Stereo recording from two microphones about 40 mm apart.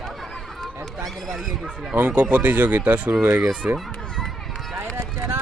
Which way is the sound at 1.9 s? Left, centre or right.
Right.